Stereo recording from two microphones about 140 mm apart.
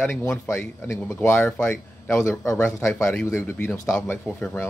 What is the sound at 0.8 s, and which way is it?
A man's voice, 20° left (ahead or behind).